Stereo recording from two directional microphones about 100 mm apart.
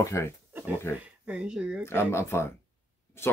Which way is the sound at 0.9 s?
25° left (ahead or behind).